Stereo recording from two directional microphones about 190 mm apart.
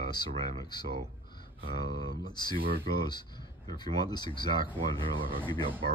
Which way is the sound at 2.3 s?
20° left (ahead or behind).